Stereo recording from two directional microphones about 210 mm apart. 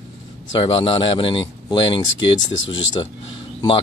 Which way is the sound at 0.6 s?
25° left (ahead or behind).